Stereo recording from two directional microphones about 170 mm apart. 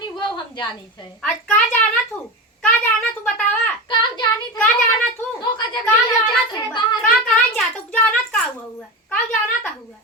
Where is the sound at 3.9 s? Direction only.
25° left (ahead or behind).